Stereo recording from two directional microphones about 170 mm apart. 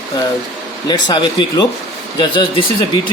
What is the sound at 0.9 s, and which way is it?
Speech, 25° left (ahead or behind).